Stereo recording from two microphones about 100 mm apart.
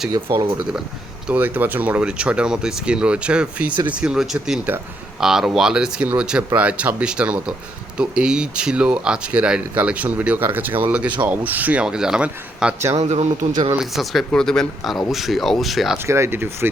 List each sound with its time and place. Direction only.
1.3 s speech: 20° right (ahead or behind)
13.0 s speech: 90° right
13.7 s speech: centre (ahead or behind)
16.0 s speech: 25° right (ahead or behind)